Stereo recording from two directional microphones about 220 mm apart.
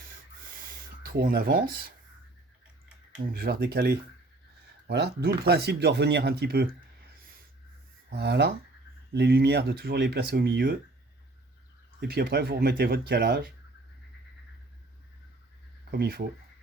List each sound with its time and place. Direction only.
1.0 s speech: 45° right (ahead or behind)
3.3 s speech: 45° right (ahead or behind)
8.1 s speech: 50° right (ahead or behind)
11.9 s speech: 45° right (ahead or behind)
15.9 s speech: 45° right (ahead or behind)